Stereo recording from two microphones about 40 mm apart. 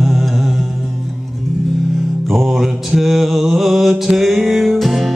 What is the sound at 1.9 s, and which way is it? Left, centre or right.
Music, centre.